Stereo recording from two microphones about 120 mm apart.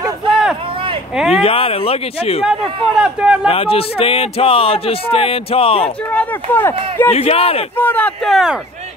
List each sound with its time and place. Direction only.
0.3 s a sound: 5° right (ahead or behind)
1.1 s speech: 5° right (ahead or behind)
1.4 s speech: 50° left (ahead or behind)
2.9 s speech: 5° right (ahead or behind)
3.4 s speech: 50° left (ahead or behind)
6.1 s speech: 20° left (ahead or behind)
7.1 s speech: 60° left (ahead or behind)
7.7 s speech: 15° left (ahead or behind)
8.2 s speech: centre (ahead or behind)